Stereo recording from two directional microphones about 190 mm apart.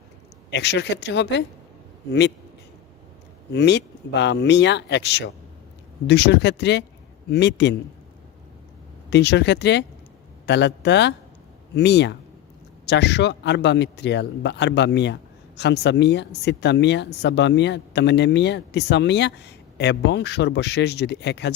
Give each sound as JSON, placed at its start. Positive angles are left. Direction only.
{"t": 0.5, "sound": "a man's voice", "side_deg": 65}
{"t": 3.5, "sound": "a man's voice", "side_deg": 65}
{"t": 9.0, "sound": "a man's voice", "side_deg": 65}